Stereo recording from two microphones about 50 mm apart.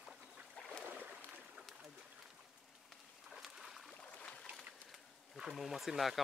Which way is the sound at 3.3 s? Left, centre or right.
Centre.